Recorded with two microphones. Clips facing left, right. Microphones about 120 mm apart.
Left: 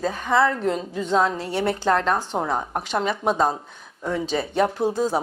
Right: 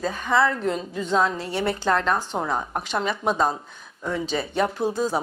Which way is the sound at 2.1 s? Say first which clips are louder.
Left 1 dB; 30° left (ahead or behind).